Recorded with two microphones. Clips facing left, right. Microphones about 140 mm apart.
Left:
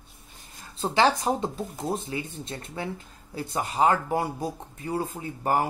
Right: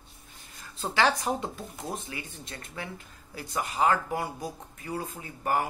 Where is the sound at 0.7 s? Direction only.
25° left (ahead or behind).